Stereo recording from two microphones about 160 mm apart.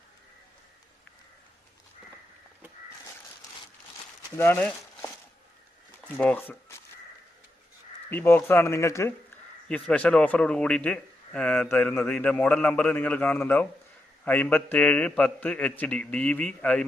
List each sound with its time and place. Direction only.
4.4 s speech: 15° left (ahead or behind)
8.1 s speech: 15° left (ahead or behind)
9.6 s speech: 5° left (ahead or behind)